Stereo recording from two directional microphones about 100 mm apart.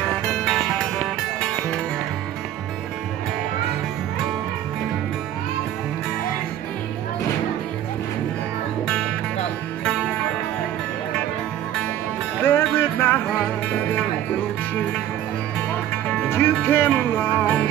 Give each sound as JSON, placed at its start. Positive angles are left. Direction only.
{"t": 0.5, "sound": "music", "side_deg": 5}
{"t": 8.8, "sound": "music", "side_deg": 5}
{"t": 12.4, "sound": "music", "side_deg": 20}
{"t": 16.3, "sound": "music", "side_deg": 20}